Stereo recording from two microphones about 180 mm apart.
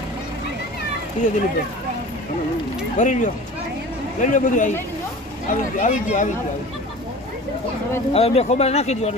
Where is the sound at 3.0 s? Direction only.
45° left (ahead or behind).